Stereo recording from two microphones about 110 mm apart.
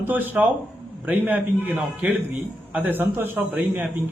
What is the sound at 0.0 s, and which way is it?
A man's voice, 15° right (ahead or behind).